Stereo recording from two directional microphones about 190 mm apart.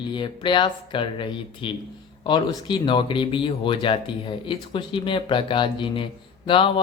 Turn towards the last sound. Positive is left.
turn(degrees=25)  # may be behind; listen again after turning